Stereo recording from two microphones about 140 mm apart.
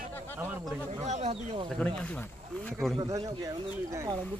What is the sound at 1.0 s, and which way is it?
Speech, 55° right (ahead or behind).